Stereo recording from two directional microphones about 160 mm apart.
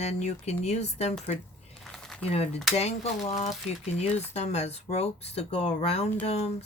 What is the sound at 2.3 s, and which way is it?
Speech, 40° left (ahead or behind).